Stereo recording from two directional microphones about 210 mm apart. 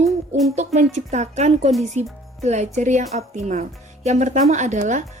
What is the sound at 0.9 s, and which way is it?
A woman's voice, 35° right (ahead or behind).